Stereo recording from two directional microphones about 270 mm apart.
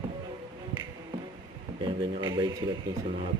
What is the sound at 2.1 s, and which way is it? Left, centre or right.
Music, centre.